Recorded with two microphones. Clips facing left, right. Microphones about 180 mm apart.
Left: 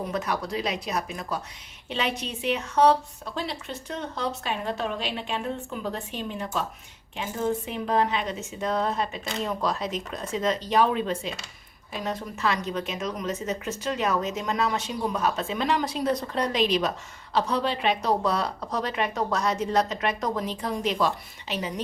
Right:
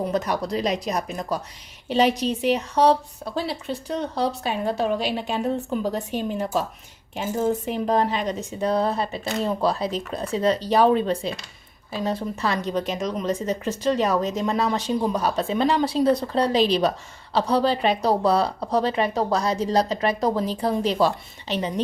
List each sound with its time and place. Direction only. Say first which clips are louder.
0.1 s a woman's voice: right 4 dB; 35° right (ahead or behind)